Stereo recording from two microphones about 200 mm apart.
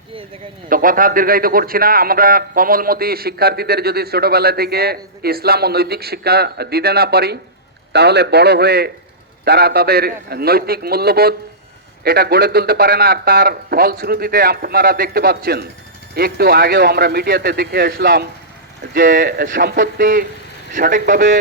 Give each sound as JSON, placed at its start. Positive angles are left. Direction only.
{"t": 0.7, "sound": "a man's voice", "side_deg": -45}